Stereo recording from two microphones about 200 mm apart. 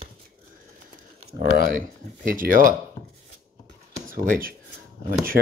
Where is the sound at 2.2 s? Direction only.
45° right (ahead or behind).